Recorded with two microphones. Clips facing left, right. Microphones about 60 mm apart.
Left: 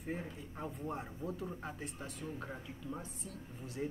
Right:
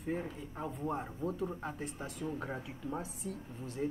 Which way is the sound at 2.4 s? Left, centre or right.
Right.